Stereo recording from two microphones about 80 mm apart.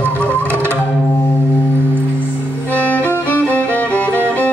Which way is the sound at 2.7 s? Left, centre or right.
Left.